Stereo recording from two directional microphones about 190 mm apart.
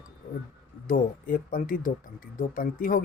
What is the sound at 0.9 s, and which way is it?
Speech, 45° left (ahead or behind).